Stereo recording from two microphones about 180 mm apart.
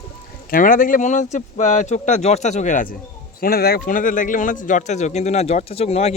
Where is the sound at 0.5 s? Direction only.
50° left (ahead or behind).